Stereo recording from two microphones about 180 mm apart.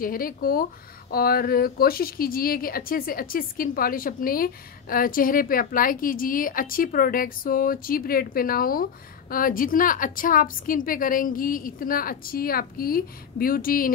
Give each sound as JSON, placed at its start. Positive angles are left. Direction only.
{"t": 0.0, "sound": "speech", "side_deg": 50}